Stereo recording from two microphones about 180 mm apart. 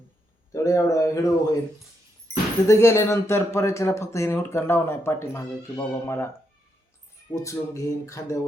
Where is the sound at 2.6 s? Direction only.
15° left (ahead or behind).